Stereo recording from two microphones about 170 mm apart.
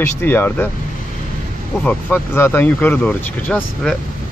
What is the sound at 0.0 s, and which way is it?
Speech, 10° left (ahead or behind).